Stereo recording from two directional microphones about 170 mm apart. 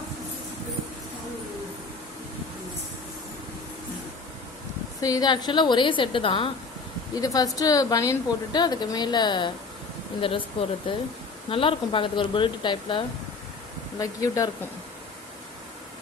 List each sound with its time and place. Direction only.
4.9 s a woman's voice: 20° left (ahead or behind)
7.2 s a woman's voice: 20° left (ahead or behind)